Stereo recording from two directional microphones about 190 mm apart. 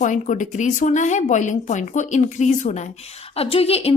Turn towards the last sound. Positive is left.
turn(degrees=30)  # may be behind; listen again after turning